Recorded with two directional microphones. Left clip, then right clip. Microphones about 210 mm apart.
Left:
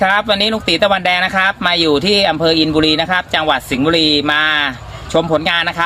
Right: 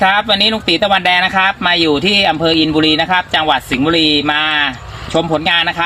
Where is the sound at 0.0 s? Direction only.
10° left (ahead or behind).